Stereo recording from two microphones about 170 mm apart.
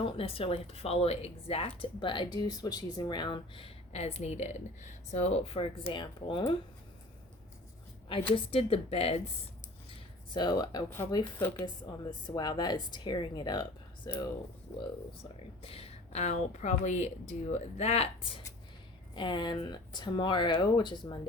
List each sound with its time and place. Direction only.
0.0 s speech: 35° left (ahead or behind)
8.4 s speech: 35° left (ahead or behind)
9.9 s a sound: 25° left (ahead or behind)
10.8 s speech: 15° left (ahead or behind)
12.3 s speech: 25° left (ahead or behind)